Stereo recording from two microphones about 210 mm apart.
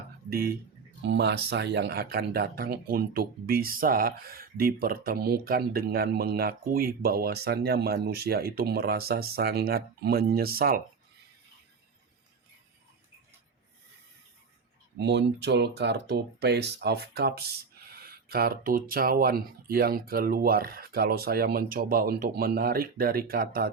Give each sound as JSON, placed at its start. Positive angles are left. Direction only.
{"t": 0.3, "sound": "speech", "side_deg": -45}
{"t": 14.9, "sound": "speech", "side_deg": -55}